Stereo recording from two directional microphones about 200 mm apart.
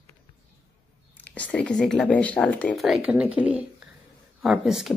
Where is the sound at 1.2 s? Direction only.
10° left (ahead or behind).